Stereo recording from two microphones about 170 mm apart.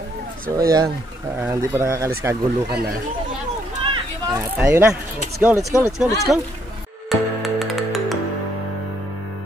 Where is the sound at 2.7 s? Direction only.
65° right (ahead or behind).